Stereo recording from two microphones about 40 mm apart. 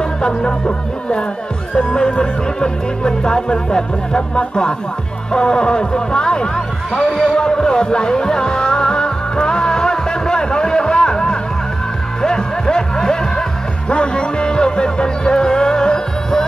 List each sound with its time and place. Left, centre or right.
0.0 s music: left
7.0 s speech: centre
7.2 s music: centre